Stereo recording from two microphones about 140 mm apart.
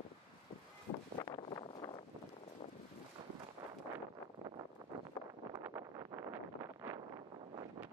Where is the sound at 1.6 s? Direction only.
30° left (ahead or behind).